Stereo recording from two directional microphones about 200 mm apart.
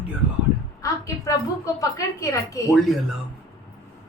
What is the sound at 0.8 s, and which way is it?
A woman's voice, 15° left (ahead or behind).